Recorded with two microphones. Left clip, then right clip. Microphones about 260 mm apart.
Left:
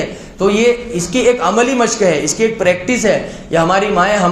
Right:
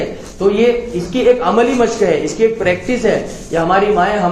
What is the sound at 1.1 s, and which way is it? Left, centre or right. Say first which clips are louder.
A man's voice: right 1 dB; left.